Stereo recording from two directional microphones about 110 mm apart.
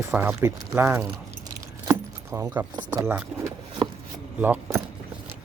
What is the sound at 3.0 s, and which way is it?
Speech, 20° right (ahead or behind).